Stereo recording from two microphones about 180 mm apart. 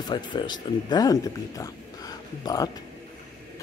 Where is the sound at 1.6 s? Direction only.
20° left (ahead or behind).